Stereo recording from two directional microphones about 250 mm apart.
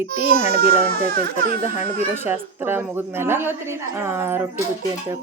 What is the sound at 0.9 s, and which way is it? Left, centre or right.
Speech, right.